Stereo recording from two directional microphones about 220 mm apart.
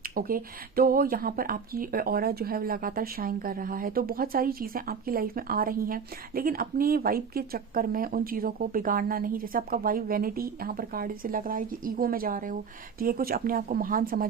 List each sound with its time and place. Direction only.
0.1 s speech: 40° right (ahead or behind)